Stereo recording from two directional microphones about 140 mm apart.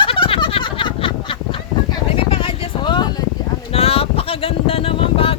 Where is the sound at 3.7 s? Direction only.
45° left (ahead or behind).